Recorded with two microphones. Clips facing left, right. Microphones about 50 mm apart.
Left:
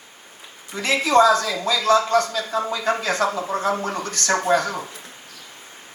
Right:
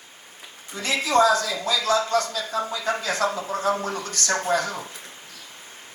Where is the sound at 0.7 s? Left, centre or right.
Left.